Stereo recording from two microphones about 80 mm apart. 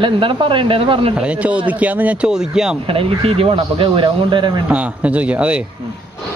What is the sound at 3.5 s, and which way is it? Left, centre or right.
Speech, right.